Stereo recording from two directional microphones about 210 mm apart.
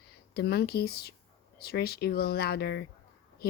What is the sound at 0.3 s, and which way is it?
A woman's voice, 50° left (ahead or behind).